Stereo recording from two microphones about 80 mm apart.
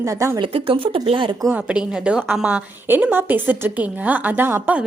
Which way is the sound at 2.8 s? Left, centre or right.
Right.